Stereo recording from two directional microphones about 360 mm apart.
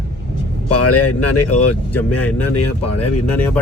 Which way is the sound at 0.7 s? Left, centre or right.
Left.